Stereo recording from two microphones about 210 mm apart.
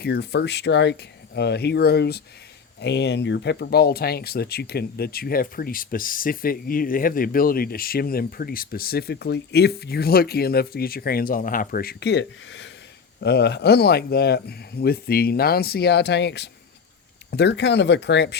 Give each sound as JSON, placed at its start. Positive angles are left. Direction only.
{"t": 0.0, "sound": "speech", "side_deg": 50}